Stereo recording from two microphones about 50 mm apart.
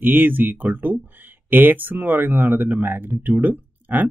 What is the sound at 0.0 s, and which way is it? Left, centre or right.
Speech, right.